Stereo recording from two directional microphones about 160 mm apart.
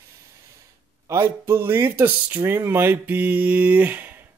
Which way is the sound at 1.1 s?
15° right (ahead or behind).